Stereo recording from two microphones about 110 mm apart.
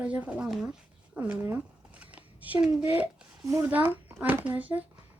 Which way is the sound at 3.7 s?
15° right (ahead or behind).